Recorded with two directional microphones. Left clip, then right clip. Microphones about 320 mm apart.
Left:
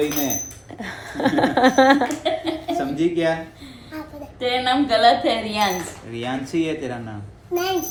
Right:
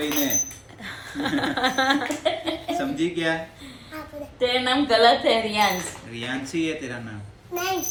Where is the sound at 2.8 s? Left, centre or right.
Centre.